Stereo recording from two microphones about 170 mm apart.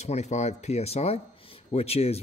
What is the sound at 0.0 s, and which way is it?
Speech, 40° left (ahead or behind).